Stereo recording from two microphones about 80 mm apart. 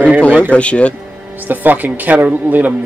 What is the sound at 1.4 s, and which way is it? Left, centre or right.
Speech, right.